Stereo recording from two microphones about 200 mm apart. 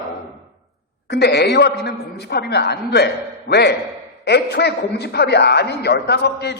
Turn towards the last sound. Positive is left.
turn(degrees=55)  # may be behind; listen again after turning